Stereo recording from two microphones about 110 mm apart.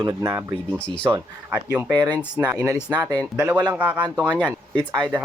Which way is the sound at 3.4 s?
15° right (ahead or behind).